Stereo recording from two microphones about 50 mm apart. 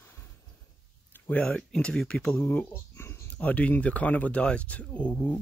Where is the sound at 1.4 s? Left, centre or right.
Centre.